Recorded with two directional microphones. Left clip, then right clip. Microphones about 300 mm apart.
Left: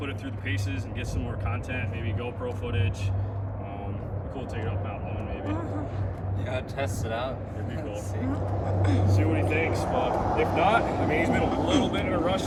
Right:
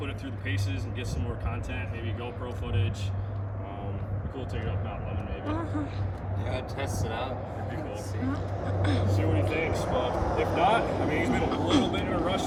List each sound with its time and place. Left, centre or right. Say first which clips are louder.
8.8 s speech: left 1 dB; centre
9.9 s speech: left 3 dB; left
10.6 s speech: even; centre